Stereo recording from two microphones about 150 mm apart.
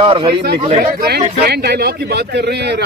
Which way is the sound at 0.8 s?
90° right.